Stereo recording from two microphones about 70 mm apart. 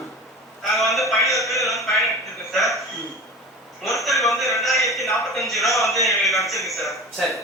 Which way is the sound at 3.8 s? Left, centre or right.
Centre.